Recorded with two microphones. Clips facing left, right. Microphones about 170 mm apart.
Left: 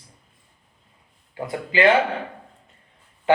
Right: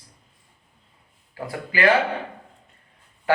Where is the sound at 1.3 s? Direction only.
25° left (ahead or behind).